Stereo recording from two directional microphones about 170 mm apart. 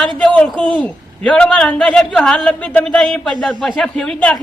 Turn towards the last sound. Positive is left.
turn(degrees=5)  # may be behind; listen again after turning